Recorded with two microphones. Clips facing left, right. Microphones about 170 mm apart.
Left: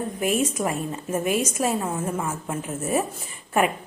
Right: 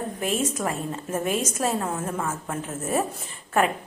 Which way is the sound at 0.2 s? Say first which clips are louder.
Left 3 dB; 10° left (ahead or behind).